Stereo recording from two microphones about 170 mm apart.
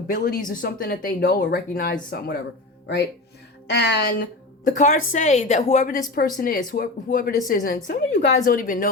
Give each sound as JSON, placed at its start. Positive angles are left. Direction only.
{"t": 0.1, "sound": "a woman's voice", "side_deg": 55}